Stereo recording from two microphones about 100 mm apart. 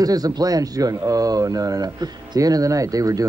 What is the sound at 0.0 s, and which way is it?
Speech, 40° right (ahead or behind).